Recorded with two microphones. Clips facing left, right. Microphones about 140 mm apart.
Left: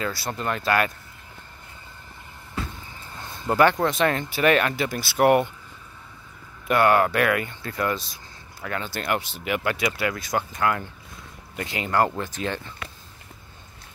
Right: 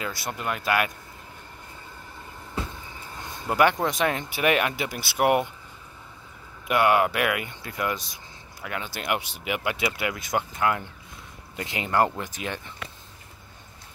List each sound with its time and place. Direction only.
0.0 s speech: 15° right (ahead or behind)
3.4 s speech: 15° right (ahead or behind)
6.7 s speech: 10° right (ahead or behind)